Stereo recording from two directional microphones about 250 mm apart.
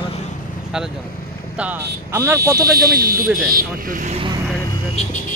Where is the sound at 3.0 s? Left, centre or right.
Right.